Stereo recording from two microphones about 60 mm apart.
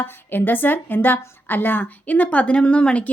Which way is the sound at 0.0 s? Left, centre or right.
Left.